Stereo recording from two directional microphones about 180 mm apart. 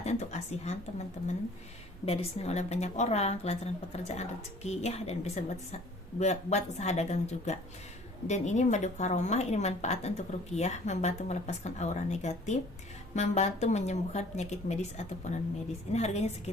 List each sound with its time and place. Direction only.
0.0 s a woman's voice: 40° left (ahead or behind)